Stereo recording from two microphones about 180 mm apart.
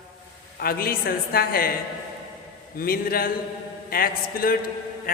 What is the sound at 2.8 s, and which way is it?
A woman's voice, 55° left (ahead or behind).